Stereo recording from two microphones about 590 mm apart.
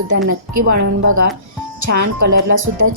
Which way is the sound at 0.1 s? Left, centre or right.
Right.